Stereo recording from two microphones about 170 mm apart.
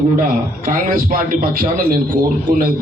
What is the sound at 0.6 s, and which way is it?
A man's voice, 55° right (ahead or behind).